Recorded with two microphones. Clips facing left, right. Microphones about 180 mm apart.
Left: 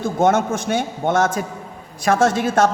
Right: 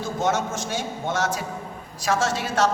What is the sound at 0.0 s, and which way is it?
A man's voice, 55° left (ahead or behind).